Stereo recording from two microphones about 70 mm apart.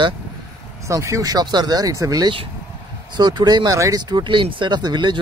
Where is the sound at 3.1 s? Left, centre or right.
Right.